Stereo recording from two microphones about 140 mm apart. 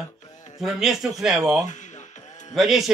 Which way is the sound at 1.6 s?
60° left (ahead or behind).